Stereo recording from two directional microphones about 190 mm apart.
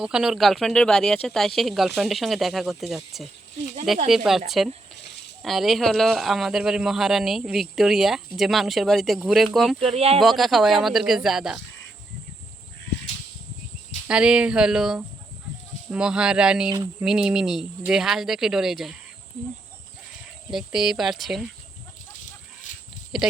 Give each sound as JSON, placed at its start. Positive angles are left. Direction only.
{"t": 0.0, "sound": "speech", "side_deg": -5}
{"t": 9.8, "sound": "speech", "side_deg": -30}
{"t": 10.2, "sound": "speech", "side_deg": 0}
{"t": 14.1, "sound": "speech", "side_deg": -5}
{"t": 20.5, "sound": "speech", "side_deg": 0}
{"t": 23.1, "sound": "speech", "side_deg": -5}